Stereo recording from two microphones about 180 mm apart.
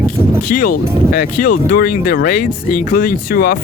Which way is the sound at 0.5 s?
50° left (ahead or behind).